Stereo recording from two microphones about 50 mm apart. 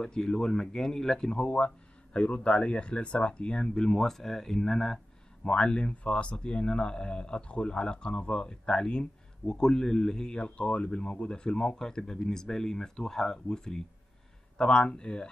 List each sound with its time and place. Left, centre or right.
0.0 s speech: centre
5.4 s speech: left